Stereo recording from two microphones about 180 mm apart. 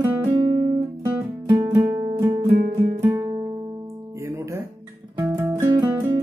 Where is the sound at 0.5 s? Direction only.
25° right (ahead or behind).